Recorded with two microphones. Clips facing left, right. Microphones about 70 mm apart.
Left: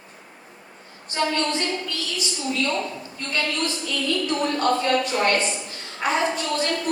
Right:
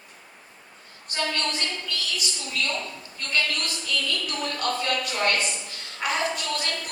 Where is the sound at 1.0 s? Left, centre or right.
Left.